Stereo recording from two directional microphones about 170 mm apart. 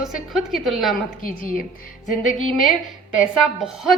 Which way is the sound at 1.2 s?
55° left (ahead or behind).